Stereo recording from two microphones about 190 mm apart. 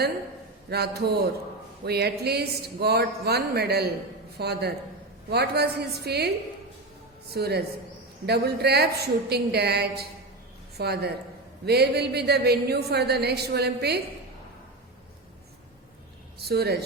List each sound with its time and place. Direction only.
0.7 s speech: 55° right (ahead or behind)
16.4 s speech: 55° right (ahead or behind)